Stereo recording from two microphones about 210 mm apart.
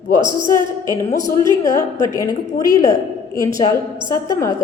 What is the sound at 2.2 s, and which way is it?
A woman's voice, 15° left (ahead or behind).